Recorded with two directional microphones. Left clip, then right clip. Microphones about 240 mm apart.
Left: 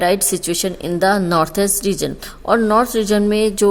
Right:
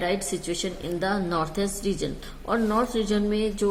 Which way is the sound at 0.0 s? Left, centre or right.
Left.